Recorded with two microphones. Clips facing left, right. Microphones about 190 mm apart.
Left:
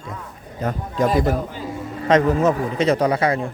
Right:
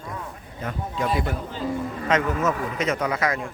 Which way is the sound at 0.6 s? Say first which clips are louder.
Left 7 dB; 40° left (ahead or behind).